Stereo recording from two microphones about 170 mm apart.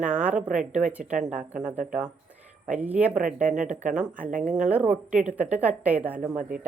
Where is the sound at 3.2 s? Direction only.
50° right (ahead or behind).